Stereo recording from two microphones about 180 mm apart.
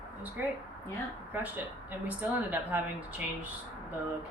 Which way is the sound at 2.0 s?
10° right (ahead or behind).